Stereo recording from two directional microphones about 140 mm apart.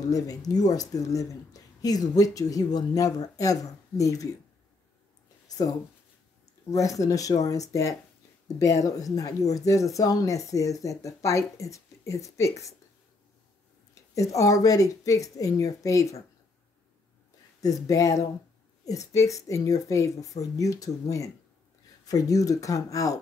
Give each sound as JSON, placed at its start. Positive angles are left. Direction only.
{"t": 0.0, "sound": "speech", "side_deg": 25}
{"t": 6.7, "sound": "speech", "side_deg": 25}
{"t": 14.1, "sound": "speech", "side_deg": 25}
{"t": 17.6, "sound": "speech", "side_deg": 25}